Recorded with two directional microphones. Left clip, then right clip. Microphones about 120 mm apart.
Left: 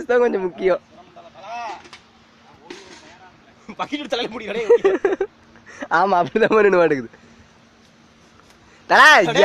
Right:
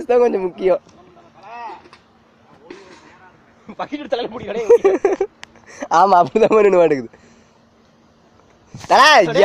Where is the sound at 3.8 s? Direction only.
20° left (ahead or behind).